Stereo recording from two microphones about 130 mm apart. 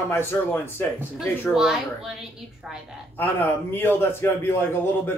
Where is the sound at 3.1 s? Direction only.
15° left (ahead or behind).